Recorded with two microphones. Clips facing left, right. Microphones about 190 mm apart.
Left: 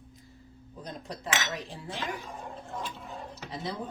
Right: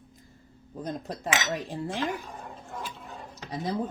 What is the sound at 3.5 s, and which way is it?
Speech, 40° right (ahead or behind).